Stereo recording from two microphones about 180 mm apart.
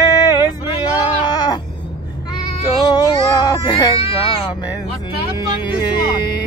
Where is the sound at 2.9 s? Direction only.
20° left (ahead or behind).